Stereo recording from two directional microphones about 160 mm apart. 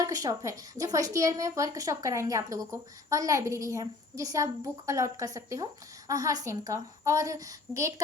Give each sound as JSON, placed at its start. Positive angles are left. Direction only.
{"t": 0.0, "sound": "a woman's voice", "side_deg": -20}